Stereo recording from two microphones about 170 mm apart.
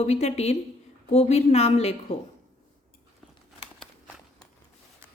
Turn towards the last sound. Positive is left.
turn(degrees=5)  # may be behind; listen again after turning